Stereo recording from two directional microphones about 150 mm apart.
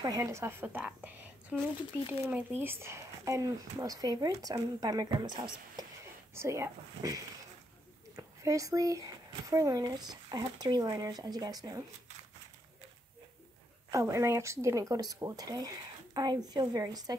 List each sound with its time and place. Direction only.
0.0 s a woman's voice: 20° right (ahead or behind)
6.3 s speech: 20° right (ahead or behind)
8.2 s speech: 20° right (ahead or behind)
13.8 s speech: 20° right (ahead or behind)